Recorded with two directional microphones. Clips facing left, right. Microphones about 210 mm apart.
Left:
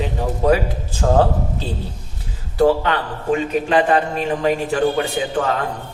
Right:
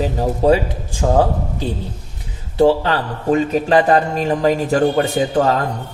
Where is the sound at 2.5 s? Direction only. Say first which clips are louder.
Right 2 dB; 25° right (ahead or behind).